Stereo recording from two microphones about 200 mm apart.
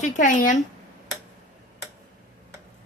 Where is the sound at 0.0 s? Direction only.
40° left (ahead or behind).